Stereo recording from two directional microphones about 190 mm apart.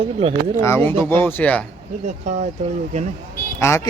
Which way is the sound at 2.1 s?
35° right (ahead or behind).